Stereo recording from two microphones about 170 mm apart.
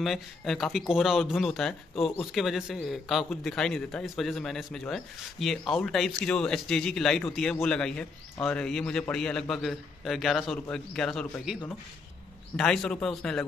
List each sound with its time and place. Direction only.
0.0 s speech: centre (ahead or behind)